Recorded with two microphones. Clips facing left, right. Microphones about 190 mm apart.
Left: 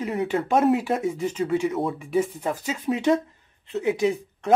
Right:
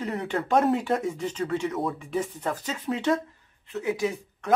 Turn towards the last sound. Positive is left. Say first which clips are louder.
# left 5 dB
turn(degrees=20)  # may be behind; listen again after turning